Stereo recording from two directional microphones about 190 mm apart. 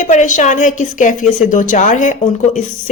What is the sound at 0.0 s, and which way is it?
A woman's voice, 40° left (ahead or behind).